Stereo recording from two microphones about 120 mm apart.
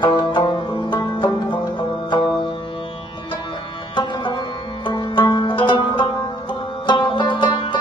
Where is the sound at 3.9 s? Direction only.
40° left (ahead or behind).